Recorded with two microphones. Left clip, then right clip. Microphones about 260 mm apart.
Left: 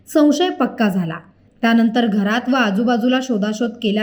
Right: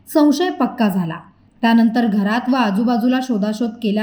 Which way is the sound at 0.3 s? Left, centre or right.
Centre.